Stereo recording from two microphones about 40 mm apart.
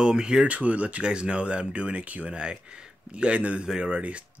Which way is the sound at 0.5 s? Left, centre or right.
Right.